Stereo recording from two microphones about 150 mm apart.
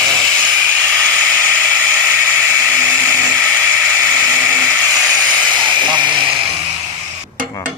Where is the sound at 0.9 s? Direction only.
10° left (ahead or behind).